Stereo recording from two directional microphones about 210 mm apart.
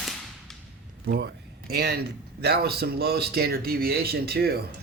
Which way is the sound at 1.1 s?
45° right (ahead or behind).